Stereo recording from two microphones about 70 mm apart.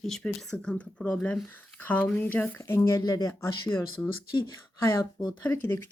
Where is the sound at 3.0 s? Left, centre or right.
Left.